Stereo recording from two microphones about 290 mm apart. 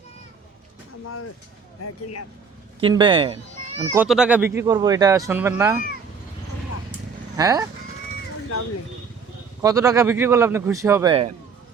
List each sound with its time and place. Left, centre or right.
1.0 s speech: left
2.8 s speech: centre
3.8 s speech: centre
7.3 s speech: centre
9.6 s speech: centre